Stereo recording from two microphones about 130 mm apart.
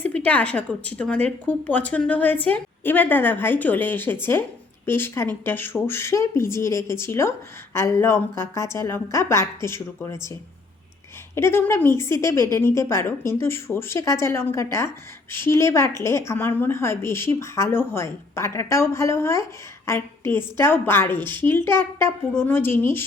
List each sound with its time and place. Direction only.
0.0 s a woman's voice: 10° left (ahead or behind)
11.3 s a woman's voice: 20° left (ahead or behind)